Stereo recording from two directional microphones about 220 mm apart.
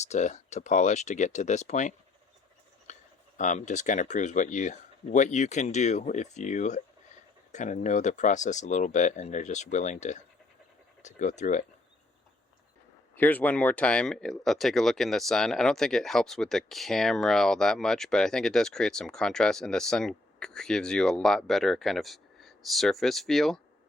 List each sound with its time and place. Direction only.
0.0 s speech: 30° left (ahead or behind)
2.9 s a sound: 35° left (ahead or behind)
3.3 s speech: 35° left (ahead or behind)
13.1 s speech: 5° left (ahead or behind)